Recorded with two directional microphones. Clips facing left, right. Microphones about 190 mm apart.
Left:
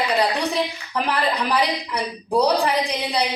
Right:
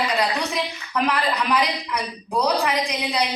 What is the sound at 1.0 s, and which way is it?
A woman's voice, 30° left (ahead or behind).